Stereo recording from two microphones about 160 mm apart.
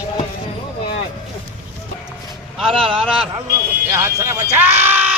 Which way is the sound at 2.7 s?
35° right (ahead or behind).